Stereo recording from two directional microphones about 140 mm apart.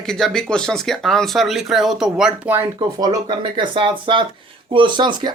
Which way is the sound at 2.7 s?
30° right (ahead or behind).